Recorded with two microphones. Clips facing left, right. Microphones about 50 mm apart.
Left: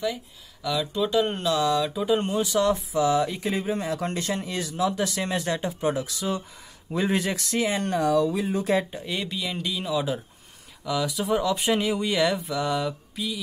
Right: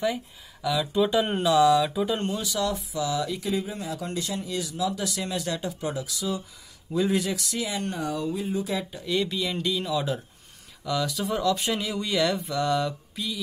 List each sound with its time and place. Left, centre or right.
0.0 s speech: centre
0.7 s speech: centre
2.1 s speech: centre
2.4 s speech: left
7.9 s speech: left
9.2 s speech: centre
12.4 s speech: centre